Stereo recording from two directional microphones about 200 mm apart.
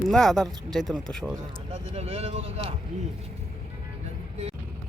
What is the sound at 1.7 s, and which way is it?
Speech, 30° right (ahead or behind).